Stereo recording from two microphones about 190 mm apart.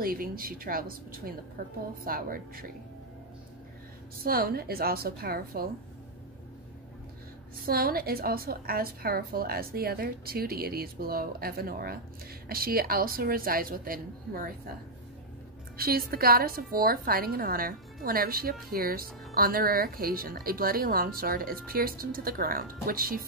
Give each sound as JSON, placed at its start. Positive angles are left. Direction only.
{"t": 0.0, "sound": "a woman's voice", "side_deg": -50}
{"t": 4.2, "sound": "a woman's voice", "side_deg": -50}
{"t": 7.6, "sound": "a woman's voice", "side_deg": -50}
{"t": 15.8, "sound": "a woman's voice", "side_deg": -50}